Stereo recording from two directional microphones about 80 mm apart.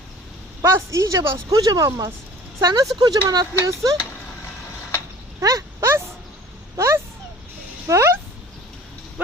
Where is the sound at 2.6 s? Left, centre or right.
Right.